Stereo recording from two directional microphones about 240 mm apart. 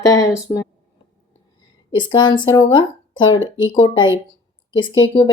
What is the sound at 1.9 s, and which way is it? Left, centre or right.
A woman's voice, centre.